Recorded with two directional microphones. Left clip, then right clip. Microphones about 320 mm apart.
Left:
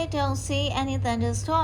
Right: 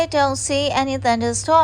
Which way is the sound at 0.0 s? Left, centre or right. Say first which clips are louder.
Right 10 dB; right.